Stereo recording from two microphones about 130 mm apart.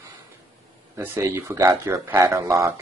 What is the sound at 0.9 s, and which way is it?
Speech, 20° right (ahead or behind).